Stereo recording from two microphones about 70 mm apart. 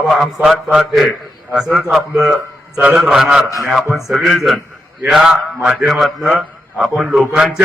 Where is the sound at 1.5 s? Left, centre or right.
Centre.